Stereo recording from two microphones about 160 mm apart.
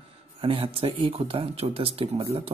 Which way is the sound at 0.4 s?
35° right (ahead or behind).